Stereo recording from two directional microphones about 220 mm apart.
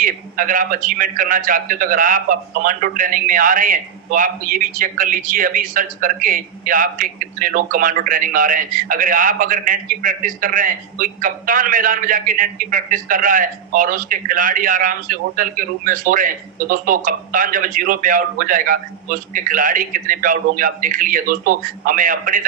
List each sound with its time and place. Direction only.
0.0 s a man's voice: 40° right (ahead or behind)